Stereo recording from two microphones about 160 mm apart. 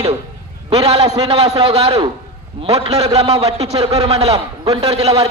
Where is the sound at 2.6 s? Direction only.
40° right (ahead or behind).